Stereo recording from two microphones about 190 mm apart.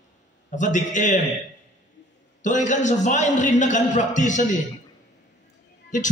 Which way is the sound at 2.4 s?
40° left (ahead or behind).